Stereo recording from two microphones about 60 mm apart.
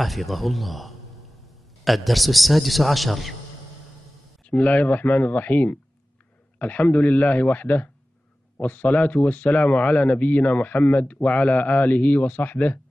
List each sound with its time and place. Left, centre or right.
0.0 s a man's voice: centre
4.5 s a man's voice: left